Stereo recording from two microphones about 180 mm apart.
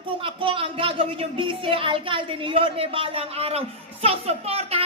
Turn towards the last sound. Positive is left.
turn(degrees=-35)  # may be behind; listen again after turning